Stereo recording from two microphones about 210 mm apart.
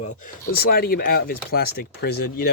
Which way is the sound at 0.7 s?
45° left (ahead or behind).